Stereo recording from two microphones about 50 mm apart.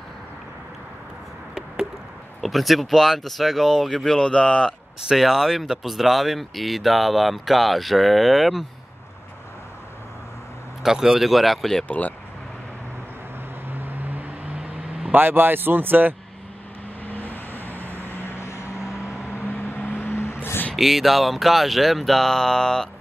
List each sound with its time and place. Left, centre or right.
2.4 s speech: centre
4.2 s speech: centre
5.0 s speech: centre
10.8 s speech: centre
13.7 s vehicle: right
15.0 s speech: right
17.0 s vehicle: left
18.0 s vehicle: left
20.7 s speech: centre